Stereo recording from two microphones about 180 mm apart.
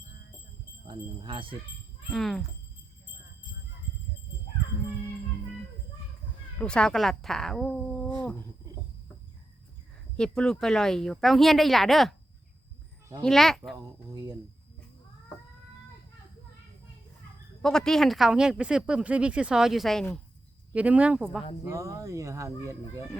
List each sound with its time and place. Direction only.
0.9 s speech: 30° right (ahead or behind)
2.1 s speech: centre (ahead or behind)
6.6 s speech: 5° left (ahead or behind)
10.2 s speech: 5° left (ahead or behind)
13.2 s speech: centre (ahead or behind)
14.1 s speech: 20° right (ahead or behind)
17.6 s speech: 5° left (ahead or behind)
21.6 s speech: 15° right (ahead or behind)